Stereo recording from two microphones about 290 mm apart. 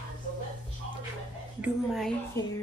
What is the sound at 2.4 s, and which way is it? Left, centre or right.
Speech, centre.